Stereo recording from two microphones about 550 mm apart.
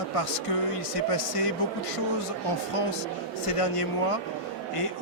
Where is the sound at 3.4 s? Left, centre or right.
Left.